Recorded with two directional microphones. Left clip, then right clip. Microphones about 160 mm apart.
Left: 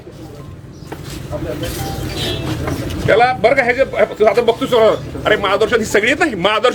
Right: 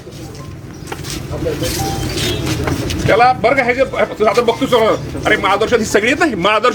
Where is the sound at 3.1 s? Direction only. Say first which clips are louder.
Right 1 dB; 10° left (ahead or behind).